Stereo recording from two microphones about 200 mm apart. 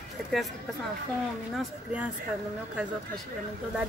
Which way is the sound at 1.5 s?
5° right (ahead or behind).